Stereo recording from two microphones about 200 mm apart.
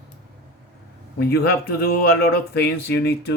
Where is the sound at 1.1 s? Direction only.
50° left (ahead or behind).